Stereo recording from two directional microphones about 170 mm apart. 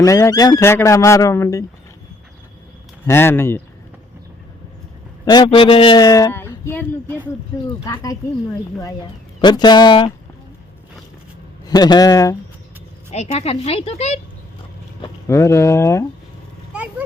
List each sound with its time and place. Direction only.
0.0 s speech: 20° left (ahead or behind)
3.1 s speech: 15° left (ahead or behind)
5.2 s speech: 25° left (ahead or behind)
9.4 s speech: 25° left (ahead or behind)
11.6 s speech: 25° left (ahead or behind)
13.1 s speech: 40° left (ahead or behind)
15.3 s speech: 15° left (ahead or behind)